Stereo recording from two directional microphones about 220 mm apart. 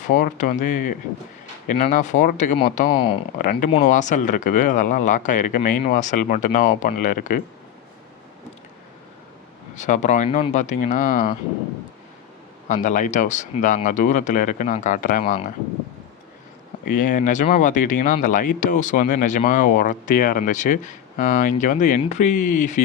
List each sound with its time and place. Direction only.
0.0 s speech: 35° left (ahead or behind)
2.9 s speech: 25° left (ahead or behind)
3.3 s speech: 35° left (ahead or behind)
9.7 s speech: 35° left (ahead or behind)
12.6 s speech: 35° left (ahead or behind)
16.8 s speech: 35° left (ahead or behind)